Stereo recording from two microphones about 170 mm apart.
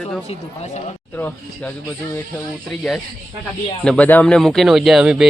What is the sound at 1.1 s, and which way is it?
Speech, 10° left (ahead or behind).